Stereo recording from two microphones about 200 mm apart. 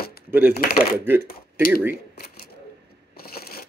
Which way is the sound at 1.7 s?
10° right (ahead or behind).